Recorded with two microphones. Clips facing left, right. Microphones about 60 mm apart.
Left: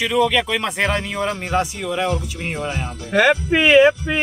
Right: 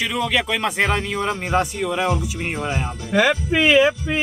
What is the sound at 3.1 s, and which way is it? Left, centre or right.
Speech, left.